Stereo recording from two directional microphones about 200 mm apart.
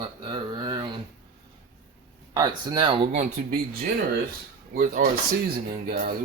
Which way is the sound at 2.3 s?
20° right (ahead or behind).